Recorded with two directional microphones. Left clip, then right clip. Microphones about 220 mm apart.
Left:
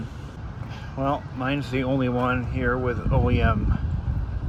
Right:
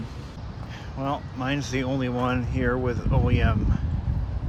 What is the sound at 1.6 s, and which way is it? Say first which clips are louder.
Speech: left 1 dB; 45° right (ahead or behind).